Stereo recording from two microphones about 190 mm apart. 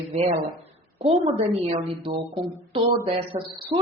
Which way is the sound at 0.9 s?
30° right (ahead or behind).